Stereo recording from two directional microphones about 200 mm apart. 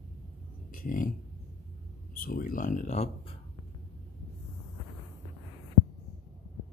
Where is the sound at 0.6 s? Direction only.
40° left (ahead or behind).